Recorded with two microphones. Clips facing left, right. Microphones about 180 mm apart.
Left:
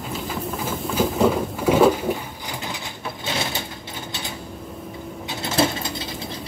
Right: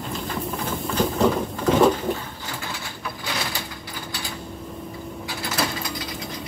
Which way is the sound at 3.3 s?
25° left (ahead or behind).